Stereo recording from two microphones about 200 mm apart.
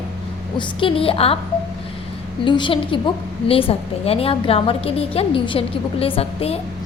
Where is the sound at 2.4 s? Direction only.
25° left (ahead or behind).